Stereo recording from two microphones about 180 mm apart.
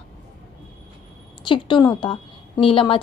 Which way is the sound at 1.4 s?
25° left (ahead or behind).